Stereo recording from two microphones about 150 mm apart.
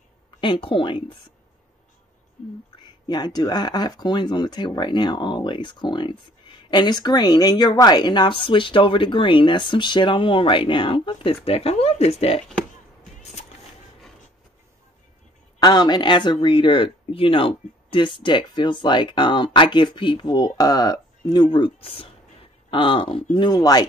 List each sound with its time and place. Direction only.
0.4 s speech: 35° left (ahead or behind)
3.1 s speech: 30° left (ahead or behind); by 12.4 s 45° left (ahead or behind)
13.2 s a sound: 50° left (ahead or behind)
15.6 s speech: 30° left (ahead or behind)